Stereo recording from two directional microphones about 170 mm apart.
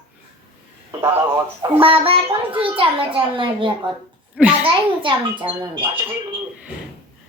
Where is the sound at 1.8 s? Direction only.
30° right (ahead or behind).